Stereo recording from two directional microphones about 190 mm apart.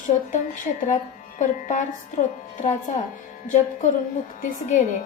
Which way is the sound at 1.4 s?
40° left (ahead or behind).